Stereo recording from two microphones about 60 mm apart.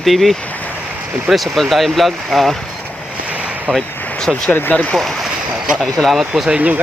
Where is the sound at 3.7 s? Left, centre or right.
Centre.